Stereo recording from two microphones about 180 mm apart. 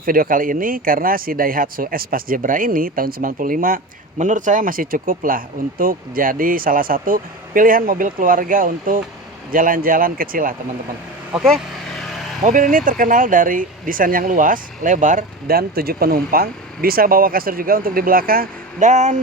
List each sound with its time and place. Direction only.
0.0 s speech: 50° right (ahead or behind)
12.4 s speech: 45° right (ahead or behind)